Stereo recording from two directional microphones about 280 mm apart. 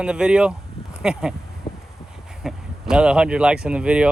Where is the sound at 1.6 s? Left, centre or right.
Centre.